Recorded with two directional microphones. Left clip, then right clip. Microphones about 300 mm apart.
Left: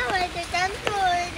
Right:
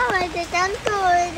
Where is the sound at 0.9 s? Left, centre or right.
Centre.